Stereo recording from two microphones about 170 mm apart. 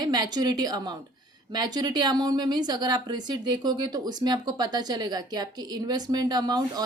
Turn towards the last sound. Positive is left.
turn(degrees=-25)  # may be behind; listen again after turning